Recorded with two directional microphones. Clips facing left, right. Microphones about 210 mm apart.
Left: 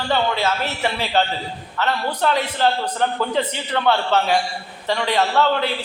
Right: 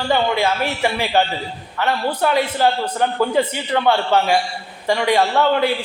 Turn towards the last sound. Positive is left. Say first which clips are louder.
# right 2 dB
turn(degrees=-10)  # may be behind; listen again after turning